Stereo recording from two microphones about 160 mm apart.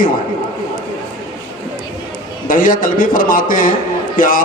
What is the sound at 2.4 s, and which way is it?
Speech, 60° left (ahead or behind).